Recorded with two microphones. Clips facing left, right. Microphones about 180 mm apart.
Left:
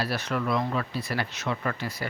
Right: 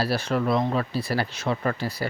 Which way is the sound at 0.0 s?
30° right (ahead or behind).